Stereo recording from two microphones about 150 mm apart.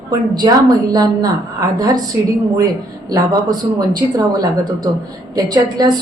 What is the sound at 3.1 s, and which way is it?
Speech, 25° right (ahead or behind).